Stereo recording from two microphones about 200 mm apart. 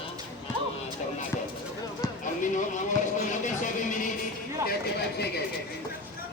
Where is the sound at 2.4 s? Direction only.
40° left (ahead or behind).